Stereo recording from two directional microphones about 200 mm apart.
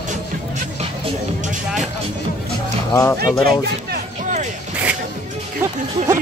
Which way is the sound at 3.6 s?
50° right (ahead or behind).